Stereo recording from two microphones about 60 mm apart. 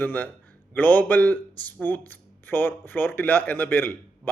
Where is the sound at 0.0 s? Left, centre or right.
Left.